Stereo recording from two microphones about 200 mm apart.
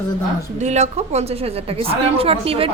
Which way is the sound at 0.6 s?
35° right (ahead or behind).